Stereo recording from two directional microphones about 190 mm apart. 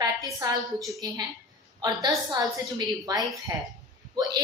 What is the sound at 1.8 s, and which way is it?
A woman's voice, 20° right (ahead or behind).